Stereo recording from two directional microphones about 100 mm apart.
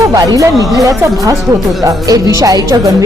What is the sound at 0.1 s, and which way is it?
Speech, 35° right (ahead or behind).